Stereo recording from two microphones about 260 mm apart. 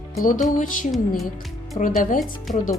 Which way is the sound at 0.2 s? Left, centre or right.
Left.